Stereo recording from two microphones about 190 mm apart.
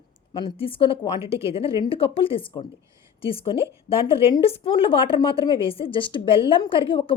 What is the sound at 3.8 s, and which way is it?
A woman's voice, 30° left (ahead or behind).